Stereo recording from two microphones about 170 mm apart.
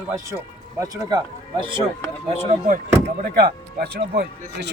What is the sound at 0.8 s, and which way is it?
Speech, 20° right (ahead or behind).